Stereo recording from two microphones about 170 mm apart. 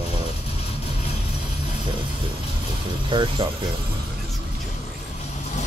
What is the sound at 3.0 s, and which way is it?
Speech, 30° right (ahead or behind).